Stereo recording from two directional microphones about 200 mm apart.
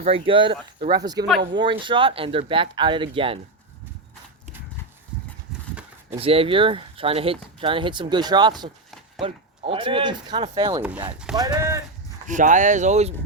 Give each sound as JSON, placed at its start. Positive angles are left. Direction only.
{"t": 0.0, "sound": "speech", "side_deg": -25}
{"t": 6.1, "sound": "speech", "side_deg": -30}
{"t": 12.3, "sound": "speech", "side_deg": -40}